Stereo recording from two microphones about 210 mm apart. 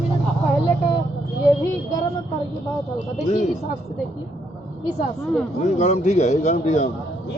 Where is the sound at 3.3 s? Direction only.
35° left (ahead or behind).